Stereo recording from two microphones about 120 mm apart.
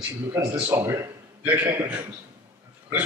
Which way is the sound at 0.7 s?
20° right (ahead or behind).